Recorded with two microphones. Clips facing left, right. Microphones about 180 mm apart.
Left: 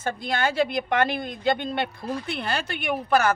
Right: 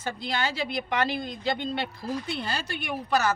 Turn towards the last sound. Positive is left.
turn(degrees=55)  # may be behind; listen again after turning